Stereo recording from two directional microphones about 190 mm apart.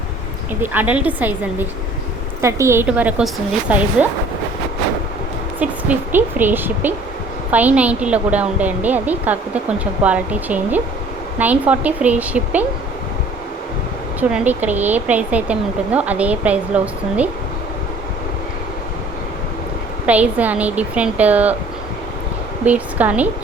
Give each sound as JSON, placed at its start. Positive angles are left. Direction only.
{"t": 0.6, "sound": "speech", "side_deg": -10}
{"t": 5.5, "sound": "speech", "side_deg": -10}
{"t": 14.2, "sound": "speech", "side_deg": -10}
{"t": 20.1, "sound": "speech", "side_deg": -10}
{"t": 22.6, "sound": "a woman's voice", "side_deg": -10}